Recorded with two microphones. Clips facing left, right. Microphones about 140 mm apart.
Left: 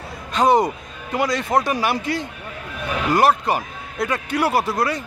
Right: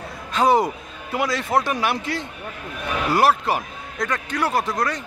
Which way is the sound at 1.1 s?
Centre (ahead or behind).